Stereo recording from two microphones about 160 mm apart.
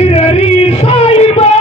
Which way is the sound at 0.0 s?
40° left (ahead or behind).